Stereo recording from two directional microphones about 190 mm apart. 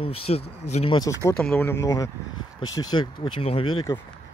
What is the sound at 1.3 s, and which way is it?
Speech, 10° left (ahead or behind).